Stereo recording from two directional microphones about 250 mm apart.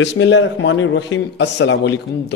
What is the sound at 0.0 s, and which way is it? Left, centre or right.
Speech, left.